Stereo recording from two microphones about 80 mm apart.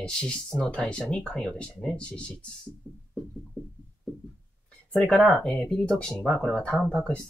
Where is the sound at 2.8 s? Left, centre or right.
Right.